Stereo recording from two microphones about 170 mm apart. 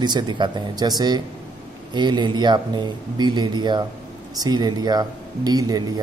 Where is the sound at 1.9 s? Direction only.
25° right (ahead or behind).